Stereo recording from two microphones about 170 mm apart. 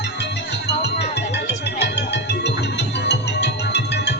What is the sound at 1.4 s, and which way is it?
Music, 90° left.